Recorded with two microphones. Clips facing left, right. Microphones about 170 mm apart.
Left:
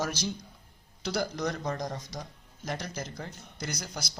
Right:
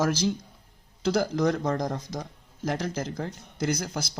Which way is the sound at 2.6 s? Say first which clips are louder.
Right 7 dB; 90° right.